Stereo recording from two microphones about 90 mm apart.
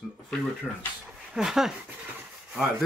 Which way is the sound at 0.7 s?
20° left (ahead or behind).